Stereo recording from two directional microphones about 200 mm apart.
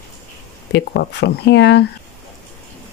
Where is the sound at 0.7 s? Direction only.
60° left (ahead or behind).